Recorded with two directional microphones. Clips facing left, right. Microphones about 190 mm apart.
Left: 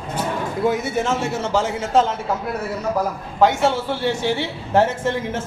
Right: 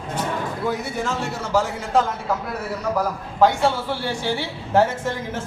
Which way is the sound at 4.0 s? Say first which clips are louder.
Left 4 dB; 20° left (ahead or behind).